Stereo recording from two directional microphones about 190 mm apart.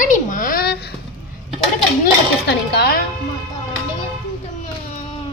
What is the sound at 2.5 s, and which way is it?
Music, 60° left (ahead or behind).